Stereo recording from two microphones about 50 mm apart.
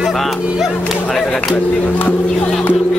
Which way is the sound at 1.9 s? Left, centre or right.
Left.